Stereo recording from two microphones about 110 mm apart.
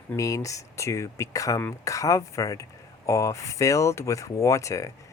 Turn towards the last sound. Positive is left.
turn(degrees=30)  # may be behind; listen again after turning